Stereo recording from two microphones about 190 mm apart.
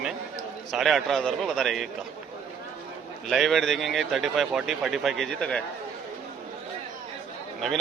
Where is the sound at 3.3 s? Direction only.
Centre (ahead or behind).